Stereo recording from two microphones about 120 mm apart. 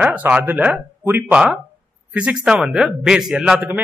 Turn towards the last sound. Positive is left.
turn(degrees=-15)  # may be behind; listen again after turning